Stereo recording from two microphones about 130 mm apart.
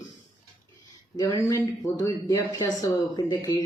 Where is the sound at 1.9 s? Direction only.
25° left (ahead or behind).